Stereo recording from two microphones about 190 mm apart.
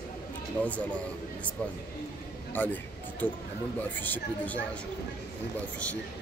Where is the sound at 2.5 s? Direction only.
10° left (ahead or behind).